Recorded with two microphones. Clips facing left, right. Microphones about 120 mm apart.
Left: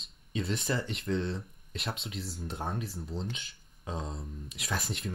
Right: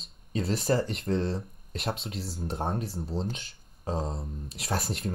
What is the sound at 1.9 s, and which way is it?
Speech, 35° right (ahead or behind).